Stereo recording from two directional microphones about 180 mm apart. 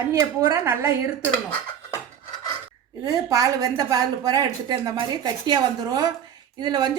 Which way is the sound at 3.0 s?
20° right (ahead or behind).